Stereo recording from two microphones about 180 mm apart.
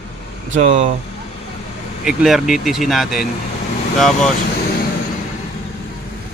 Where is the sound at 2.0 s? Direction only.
5° right (ahead or behind).